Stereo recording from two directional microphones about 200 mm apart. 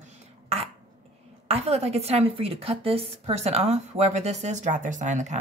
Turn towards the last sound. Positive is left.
turn(degrees=-35)  # may be behind; listen again after turning